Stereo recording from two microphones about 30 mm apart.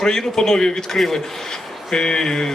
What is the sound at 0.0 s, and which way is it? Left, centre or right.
Speech, left.